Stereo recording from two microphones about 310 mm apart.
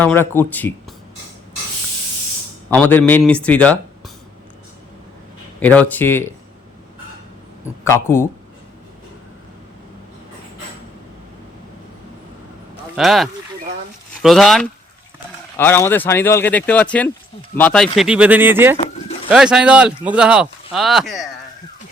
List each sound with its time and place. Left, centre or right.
0.0 s speech: centre
2.6 s speech: centre
5.5 s speech: centre
7.9 s speech: centre
13.0 s speech: centre